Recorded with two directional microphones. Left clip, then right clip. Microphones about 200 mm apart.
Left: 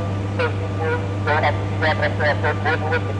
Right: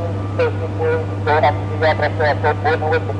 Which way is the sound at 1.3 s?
25° right (ahead or behind).